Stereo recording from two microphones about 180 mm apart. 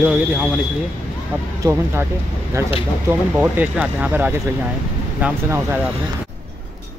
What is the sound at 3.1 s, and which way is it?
Speech, 10° right (ahead or behind).